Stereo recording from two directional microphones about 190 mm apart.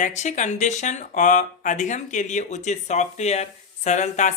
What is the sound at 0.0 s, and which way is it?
Speech, 40° left (ahead or behind).